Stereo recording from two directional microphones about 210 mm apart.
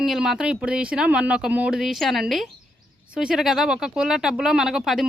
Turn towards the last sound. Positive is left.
turn(degrees=0)  # may be behind; listen again after turning